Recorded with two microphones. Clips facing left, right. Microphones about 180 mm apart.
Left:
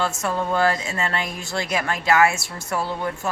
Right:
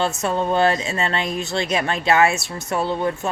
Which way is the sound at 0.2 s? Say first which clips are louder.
Right 3 dB; 25° right (ahead or behind).